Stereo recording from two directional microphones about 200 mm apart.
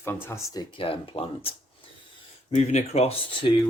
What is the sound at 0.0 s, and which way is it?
Speech, 10° left (ahead or behind).